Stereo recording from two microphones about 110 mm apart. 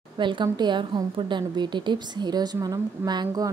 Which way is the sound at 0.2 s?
45° right (ahead or behind).